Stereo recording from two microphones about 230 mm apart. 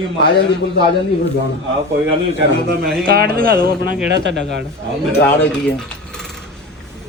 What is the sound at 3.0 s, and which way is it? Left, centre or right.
Speech, right.